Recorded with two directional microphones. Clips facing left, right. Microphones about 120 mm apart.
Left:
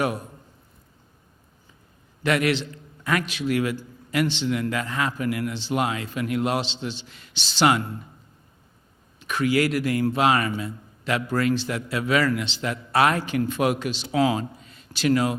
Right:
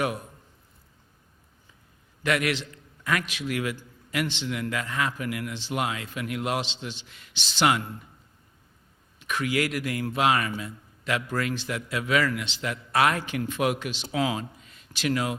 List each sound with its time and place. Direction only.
2.2 s a man's voice: 30° left (ahead or behind)
9.2 s a man's voice: 35° left (ahead or behind)